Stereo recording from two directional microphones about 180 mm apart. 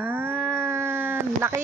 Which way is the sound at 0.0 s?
10° right (ahead or behind).